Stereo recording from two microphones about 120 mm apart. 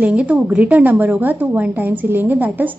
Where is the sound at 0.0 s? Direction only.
10° right (ahead or behind).